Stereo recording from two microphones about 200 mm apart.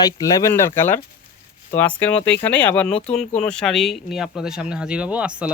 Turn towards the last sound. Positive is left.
turn(degrees=-5)  # may be behind; listen again after turning